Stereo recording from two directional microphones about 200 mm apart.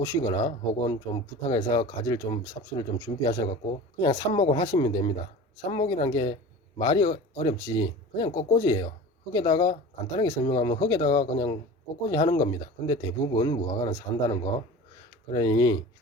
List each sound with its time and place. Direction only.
0.0 s speech: 20° left (ahead or behind)